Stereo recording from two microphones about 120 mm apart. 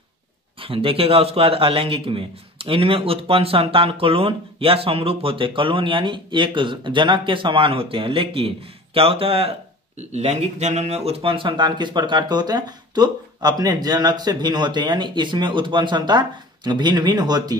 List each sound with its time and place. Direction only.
0.6 s a man's voice: 50° right (ahead or behind)
9.9 s speech: 65° right (ahead or behind); by 17.6 s 35° right (ahead or behind)